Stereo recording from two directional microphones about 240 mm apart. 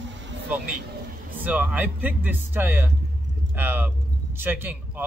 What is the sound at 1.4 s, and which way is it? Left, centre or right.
Speech, centre.